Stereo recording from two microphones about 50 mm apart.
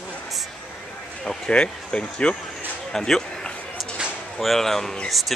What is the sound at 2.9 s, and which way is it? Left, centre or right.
Speech, centre.